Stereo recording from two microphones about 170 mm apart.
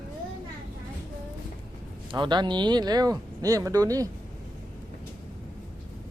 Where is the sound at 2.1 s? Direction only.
25° right (ahead or behind).